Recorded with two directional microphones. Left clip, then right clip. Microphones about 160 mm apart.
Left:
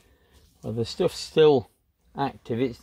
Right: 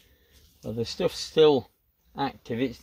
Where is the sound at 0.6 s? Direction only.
40° left (ahead or behind).